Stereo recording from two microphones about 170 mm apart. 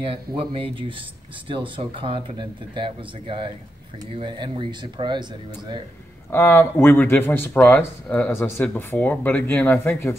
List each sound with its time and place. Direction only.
0.0 s speech: 30° right (ahead or behind)
6.3 s speech: 15° left (ahead or behind)